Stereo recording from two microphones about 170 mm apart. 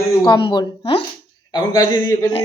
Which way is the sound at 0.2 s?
30° left (ahead or behind).